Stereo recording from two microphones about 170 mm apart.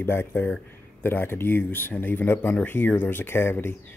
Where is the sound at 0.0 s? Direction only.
15° left (ahead or behind).